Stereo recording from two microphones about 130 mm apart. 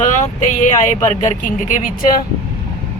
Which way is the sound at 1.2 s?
80° left.